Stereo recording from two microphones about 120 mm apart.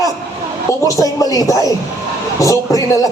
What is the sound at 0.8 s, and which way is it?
A woman's voice, 30° left (ahead or behind).